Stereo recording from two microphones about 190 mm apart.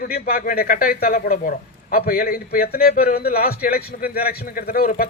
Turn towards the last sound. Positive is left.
turn(degrees=55)  # may be behind; listen again after turning